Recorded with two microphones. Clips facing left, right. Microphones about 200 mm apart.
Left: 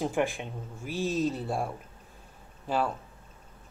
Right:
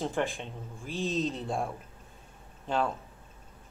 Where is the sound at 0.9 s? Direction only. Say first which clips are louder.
Left 2 dB; 15° right (ahead or behind).